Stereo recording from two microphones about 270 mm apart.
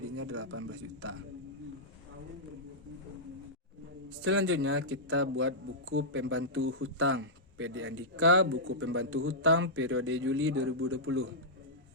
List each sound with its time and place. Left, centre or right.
0.2 s speech: right
4.2 s a man's voice: right